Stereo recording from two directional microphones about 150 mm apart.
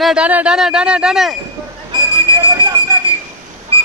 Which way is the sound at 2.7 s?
25° right (ahead or behind).